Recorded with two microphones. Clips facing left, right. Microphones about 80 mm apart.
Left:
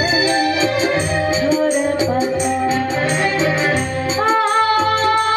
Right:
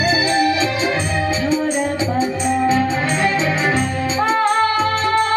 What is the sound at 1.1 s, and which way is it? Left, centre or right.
Music, centre.